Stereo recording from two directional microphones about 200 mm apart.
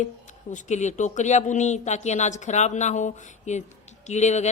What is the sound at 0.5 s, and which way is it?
Speech, 35° left (ahead or behind).